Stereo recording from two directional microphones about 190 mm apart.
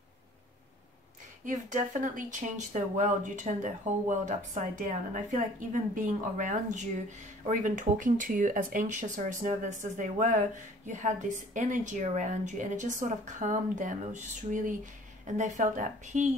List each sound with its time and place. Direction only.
1.4 s speech: 45° right (ahead or behind)